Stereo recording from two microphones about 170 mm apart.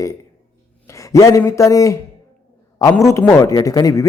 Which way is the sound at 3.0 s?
20° left (ahead or behind).